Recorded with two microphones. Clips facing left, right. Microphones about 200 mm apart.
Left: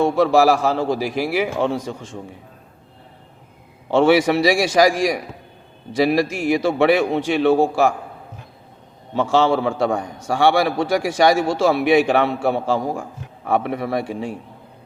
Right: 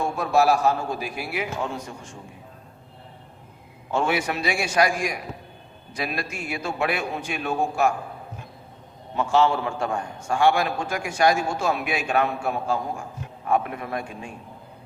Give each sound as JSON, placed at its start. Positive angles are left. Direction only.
{"t": 0.0, "sound": "a man's voice", "side_deg": 90}
{"t": 3.9, "sound": "a man's voice", "side_deg": 85}
{"t": 6.1, "sound": "a man's voice", "side_deg": 90}
{"t": 9.2, "sound": "a man's voice", "side_deg": 85}